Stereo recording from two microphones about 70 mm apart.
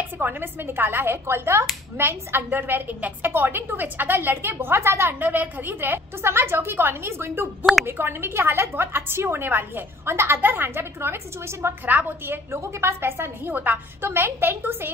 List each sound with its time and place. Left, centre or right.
0.2 s a woman's voice: right
11.8 s a woman's voice: right
12.4 s a woman's voice: right
13.5 s a woman's voice: right